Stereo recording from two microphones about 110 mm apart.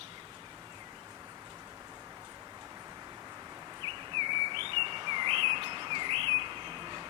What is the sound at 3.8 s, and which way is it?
Bird, 45° right (ahead or behind).